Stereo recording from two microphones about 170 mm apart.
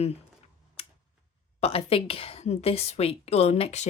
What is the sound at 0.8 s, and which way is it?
Tick-tock, 35° left (ahead or behind).